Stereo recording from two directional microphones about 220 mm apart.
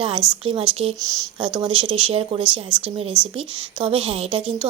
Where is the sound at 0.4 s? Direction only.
25° right (ahead or behind).